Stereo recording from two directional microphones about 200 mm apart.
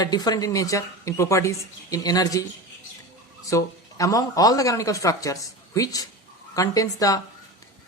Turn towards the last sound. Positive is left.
turn(degrees=15)  # may be behind; listen again after turning